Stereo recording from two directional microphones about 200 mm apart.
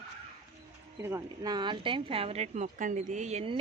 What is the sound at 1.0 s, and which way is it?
A woman's voice, 15° right (ahead or behind).